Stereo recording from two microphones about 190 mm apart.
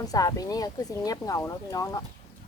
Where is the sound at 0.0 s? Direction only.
20° left (ahead or behind).